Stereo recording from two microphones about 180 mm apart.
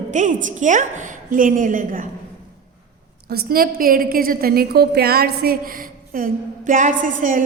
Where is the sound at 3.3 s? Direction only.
55° right (ahead or behind).